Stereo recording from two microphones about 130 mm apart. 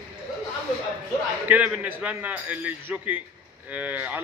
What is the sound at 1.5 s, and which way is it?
A man's voice, 15° right (ahead or behind).